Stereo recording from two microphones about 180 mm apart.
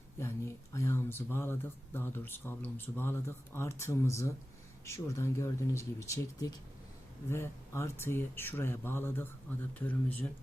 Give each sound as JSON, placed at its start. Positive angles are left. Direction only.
{"t": 0.2, "sound": "speech", "side_deg": 15}